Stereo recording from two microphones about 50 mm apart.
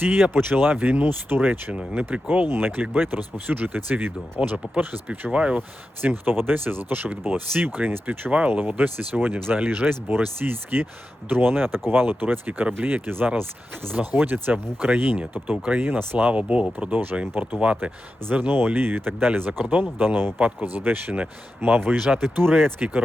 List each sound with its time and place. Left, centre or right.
0.0 s speech: right
1.7 s speech: right
2.5 s speech: right
5.5 s speech: right
8.0 s speech: right
17.4 s speech: right
18.3 s speech: right